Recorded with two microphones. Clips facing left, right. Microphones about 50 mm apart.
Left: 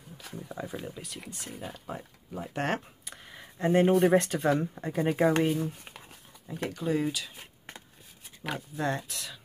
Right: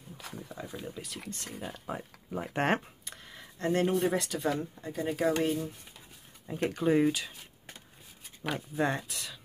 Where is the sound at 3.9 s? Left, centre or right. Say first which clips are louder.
Left 6 dB; left.